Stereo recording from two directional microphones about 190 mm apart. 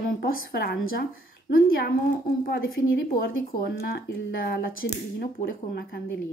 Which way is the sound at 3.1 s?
50° left (ahead or behind).